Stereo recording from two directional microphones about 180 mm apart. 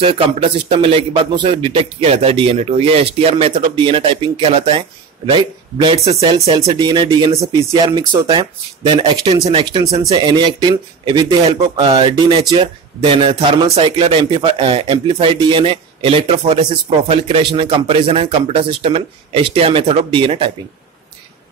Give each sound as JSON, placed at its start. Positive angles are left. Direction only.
{"t": 0.0, "sound": "a man's voice", "side_deg": -30}